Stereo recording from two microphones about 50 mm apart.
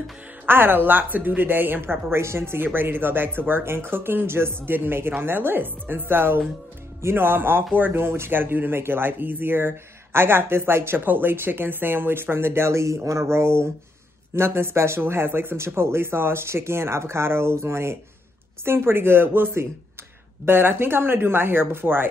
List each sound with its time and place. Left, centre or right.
0.5 s speech: right
11.1 s speech: right